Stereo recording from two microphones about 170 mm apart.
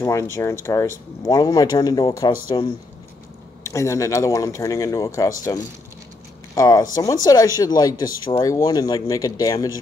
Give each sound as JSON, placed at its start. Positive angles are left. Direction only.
{"t": 0.0, "sound": "speech", "side_deg": 15}
{"t": 3.6, "sound": "speech", "side_deg": 15}